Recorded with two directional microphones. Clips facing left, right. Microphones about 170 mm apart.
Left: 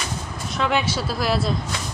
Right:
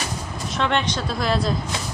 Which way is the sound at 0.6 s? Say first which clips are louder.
Even; 5° left (ahead or behind).